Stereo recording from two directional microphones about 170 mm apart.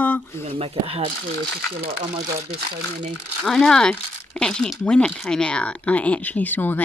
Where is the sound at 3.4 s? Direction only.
5° left (ahead or behind).